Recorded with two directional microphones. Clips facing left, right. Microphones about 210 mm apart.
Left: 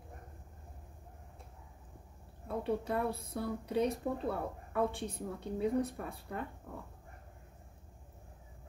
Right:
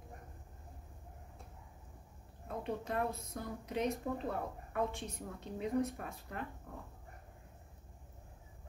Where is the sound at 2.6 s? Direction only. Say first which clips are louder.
Left 3 dB; 30° left (ahead or behind).